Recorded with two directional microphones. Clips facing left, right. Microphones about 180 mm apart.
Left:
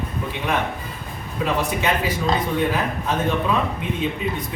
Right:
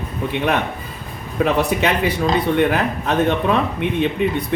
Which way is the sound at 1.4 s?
70° right (ahead or behind).